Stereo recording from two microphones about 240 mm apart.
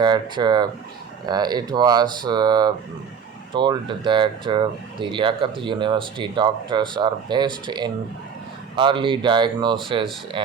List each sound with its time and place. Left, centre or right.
0.0 s speech: centre